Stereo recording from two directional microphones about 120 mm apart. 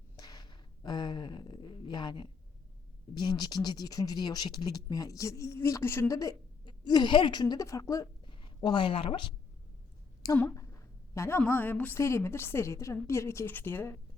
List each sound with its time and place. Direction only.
0.2 s a sound: 35° left (ahead or behind)
3.2 s speech: 35° left (ahead or behind)
8.3 s a woman's voice: 45° left (ahead or behind)
10.2 s a woman's voice: 35° left (ahead or behind)
11.1 s a woman's voice: 20° left (ahead or behind)